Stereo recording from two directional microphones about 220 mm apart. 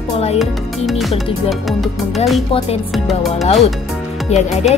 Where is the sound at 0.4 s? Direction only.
Centre (ahead or behind).